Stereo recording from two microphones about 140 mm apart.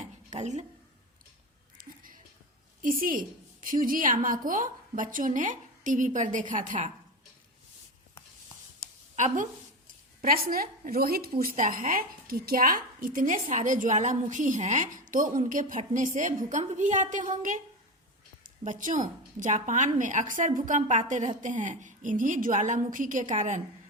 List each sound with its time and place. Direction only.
0.3 s speech: 55° right (ahead or behind)
1.8 s a sound: 90° right
2.8 s a woman's voice: 85° right; by 6.9 s 65° right (ahead or behind)
9.1 s a woman's voice: 65° right (ahead or behind)
10.2 s a woman's voice: 90° right; by 17.2 s 60° right (ahead or behind)
18.4 s a woman's voice: 70° right (ahead or behind)